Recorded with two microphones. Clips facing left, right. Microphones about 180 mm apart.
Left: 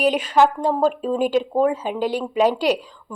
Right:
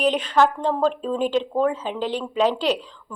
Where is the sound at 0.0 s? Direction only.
10° left (ahead or behind).